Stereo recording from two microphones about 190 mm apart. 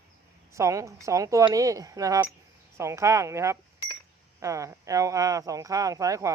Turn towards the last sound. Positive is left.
turn(degrees=-15)  # may be behind; listen again after turning